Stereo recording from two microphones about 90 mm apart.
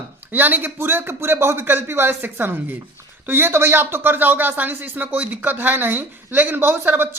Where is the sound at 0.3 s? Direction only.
20° right (ahead or behind).